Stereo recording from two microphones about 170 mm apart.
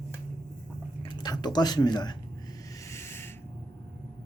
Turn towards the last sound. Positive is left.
turn(degrees=15)  # may be behind; listen again after turning